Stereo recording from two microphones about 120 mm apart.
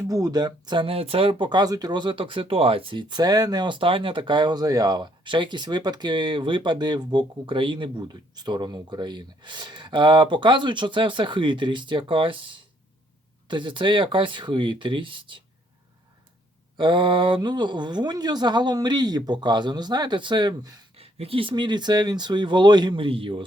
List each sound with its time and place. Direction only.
0.1 s speech: 30° right (ahead or behind)
16.7 s speech: 40° right (ahead or behind)
20.9 s speech: 55° right (ahead or behind)